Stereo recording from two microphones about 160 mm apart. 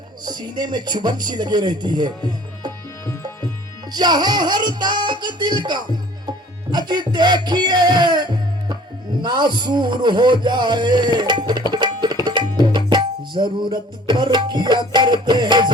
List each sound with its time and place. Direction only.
0.3 s speech: 25° right (ahead or behind)
3.9 s speech: 25° right (ahead or behind)
6.2 s music: 25° right (ahead or behind)
9.2 s speech: 25° right (ahead or behind)
11.7 s tabla: 25° right (ahead or behind)